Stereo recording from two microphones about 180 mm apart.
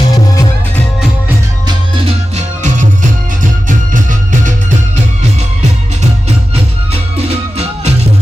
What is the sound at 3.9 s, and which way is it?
Music, 45° right (ahead or behind).